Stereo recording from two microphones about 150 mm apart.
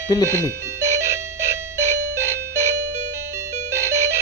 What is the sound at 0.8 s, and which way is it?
Music, 20° right (ahead or behind).